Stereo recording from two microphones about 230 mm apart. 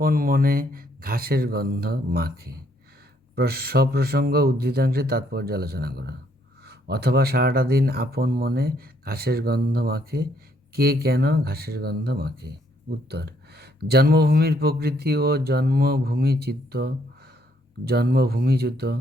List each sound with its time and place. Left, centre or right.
0.0 s speech: right